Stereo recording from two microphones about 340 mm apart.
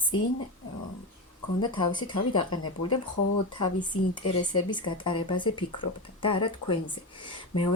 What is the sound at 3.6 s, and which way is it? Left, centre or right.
Speech, centre.